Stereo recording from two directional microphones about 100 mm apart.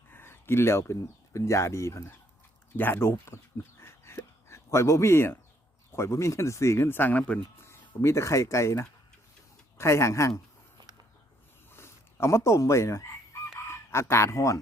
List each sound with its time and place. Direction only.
0.1 s speech: 20° left (ahead or behind)
7.6 s speech: 25° left (ahead or behind)
11.7 s speech: 25° left (ahead or behind)